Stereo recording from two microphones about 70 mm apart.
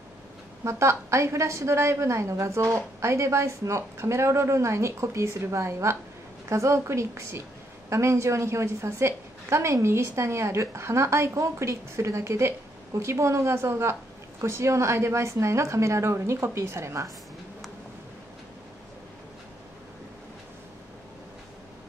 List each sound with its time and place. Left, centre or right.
0.7 s a woman's voice: right